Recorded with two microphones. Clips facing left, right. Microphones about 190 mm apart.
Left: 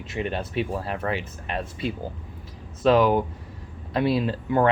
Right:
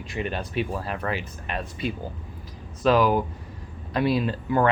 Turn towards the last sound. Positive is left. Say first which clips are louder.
# left 1 dB
turn(degrees=25)  # may be behind; listen again after turning